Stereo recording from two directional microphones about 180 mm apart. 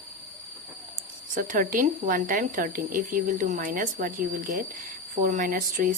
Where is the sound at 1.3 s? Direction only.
45° right (ahead or behind).